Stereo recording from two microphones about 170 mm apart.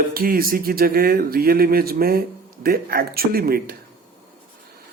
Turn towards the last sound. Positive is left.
turn(degrees=-60)  # may be behind; listen again after turning